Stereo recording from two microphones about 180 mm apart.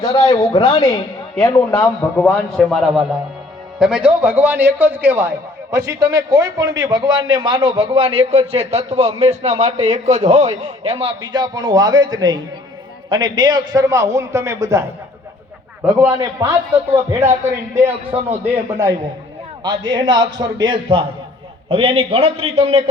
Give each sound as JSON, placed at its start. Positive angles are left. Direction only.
{"t": 0.0, "sound": "a man's voice", "side_deg": 20}
{"t": 16.1, "sound": "a man's voice", "side_deg": -15}
{"t": 19.8, "sound": "a man's voice", "side_deg": -25}